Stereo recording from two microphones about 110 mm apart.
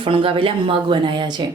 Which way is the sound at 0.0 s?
50° right (ahead or behind).